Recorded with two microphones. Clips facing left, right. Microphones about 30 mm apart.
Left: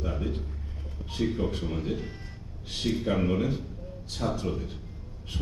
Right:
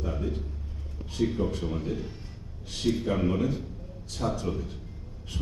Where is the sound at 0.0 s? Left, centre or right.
Centre.